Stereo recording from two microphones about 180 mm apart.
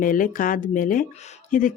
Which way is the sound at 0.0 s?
50° left (ahead or behind).